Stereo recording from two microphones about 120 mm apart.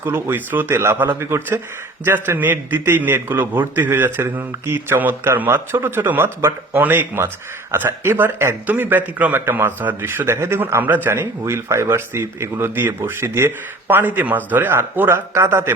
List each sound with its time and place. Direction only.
0.0 s a man's voice: 15° right (ahead or behind)